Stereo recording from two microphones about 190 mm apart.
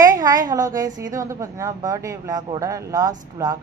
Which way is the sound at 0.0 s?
20° right (ahead or behind).